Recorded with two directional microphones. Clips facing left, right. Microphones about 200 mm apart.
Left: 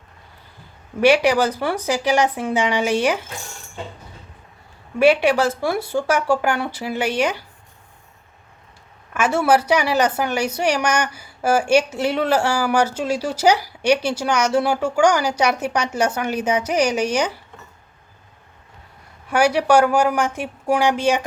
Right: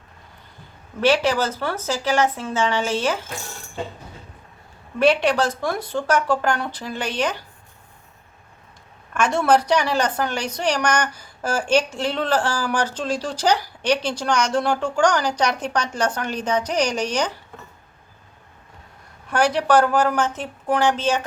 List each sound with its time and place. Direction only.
1.0 s a woman's voice: 15° left (ahead or behind)
4.9 s a woman's voice: 10° left (ahead or behind)
9.1 s a woman's voice: 5° left (ahead or behind)
19.3 s a woman's voice: 10° left (ahead or behind)